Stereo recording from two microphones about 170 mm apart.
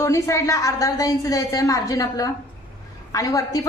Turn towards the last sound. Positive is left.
turn(degrees=20)  # may be behind; listen again after turning